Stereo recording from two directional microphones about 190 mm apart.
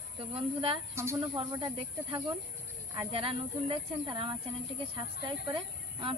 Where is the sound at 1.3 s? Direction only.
25° right (ahead or behind).